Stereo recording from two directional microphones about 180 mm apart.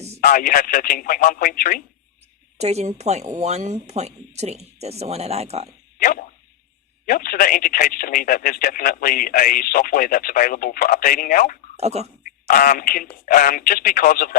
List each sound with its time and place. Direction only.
0.2 s speech: 45° left (ahead or behind)
2.6 s speech: 35° right (ahead or behind)
6.0 s a sound: 50° left (ahead or behind)
7.0 s speech: 55° left (ahead or behind)
11.8 s speech: 35° right (ahead or behind)
12.2 s speech: 50° left (ahead or behind)